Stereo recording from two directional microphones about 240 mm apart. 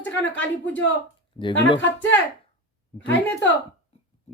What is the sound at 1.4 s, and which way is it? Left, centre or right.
Speech, left.